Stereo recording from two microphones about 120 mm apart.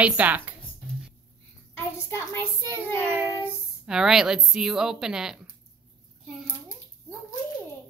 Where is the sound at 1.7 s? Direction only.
20° left (ahead or behind).